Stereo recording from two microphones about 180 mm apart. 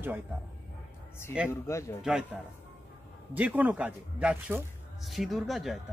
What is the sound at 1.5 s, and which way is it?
Speech, 15° left (ahead or behind).